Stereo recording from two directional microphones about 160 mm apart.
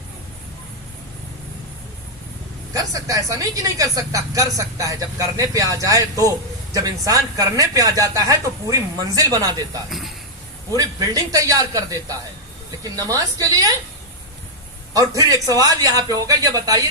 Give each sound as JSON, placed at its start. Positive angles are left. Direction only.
{"t": 2.7, "sound": "speech", "side_deg": -20}
{"t": 14.9, "sound": "speech", "side_deg": -20}